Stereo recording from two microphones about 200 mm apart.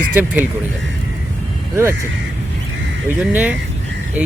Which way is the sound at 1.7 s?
15° right (ahead or behind).